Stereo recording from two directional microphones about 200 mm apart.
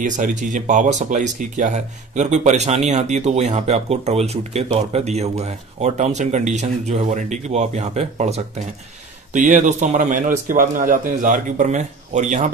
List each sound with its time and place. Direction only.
0.0 s speech: 40° right (ahead or behind)